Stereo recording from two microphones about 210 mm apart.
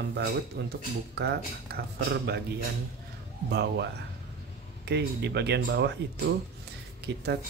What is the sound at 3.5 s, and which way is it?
Speech, 55° right (ahead or behind).